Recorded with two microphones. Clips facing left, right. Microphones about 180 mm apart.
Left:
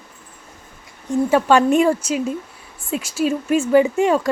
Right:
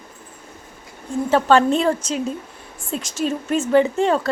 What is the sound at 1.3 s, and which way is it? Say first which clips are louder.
Speech: even; 10° left (ahead or behind).